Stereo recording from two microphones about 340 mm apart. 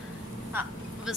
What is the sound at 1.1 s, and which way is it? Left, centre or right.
Vehicle, centre.